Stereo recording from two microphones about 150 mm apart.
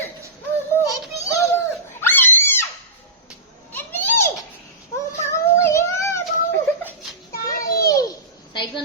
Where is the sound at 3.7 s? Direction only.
15° left (ahead or behind).